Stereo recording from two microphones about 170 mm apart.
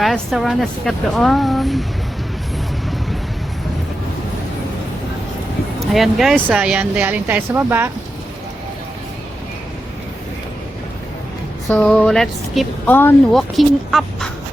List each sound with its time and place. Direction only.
0.0 s speech: centre (ahead or behind)
5.9 s speech: centre (ahead or behind)
11.7 s speech: 5° left (ahead or behind)
13.6 s speech: centre (ahead or behind)